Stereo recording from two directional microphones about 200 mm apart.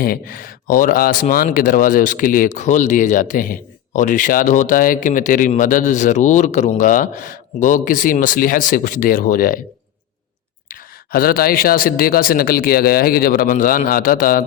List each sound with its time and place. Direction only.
0.0 s speech: 45° left (ahead or behind)
10.7 s speech: 45° left (ahead or behind)